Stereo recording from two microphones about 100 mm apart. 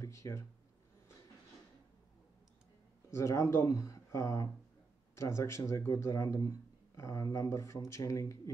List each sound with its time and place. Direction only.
0.0 s speech: 30° left (ahead or behind)
3.1 s speech: 30° left (ahead or behind)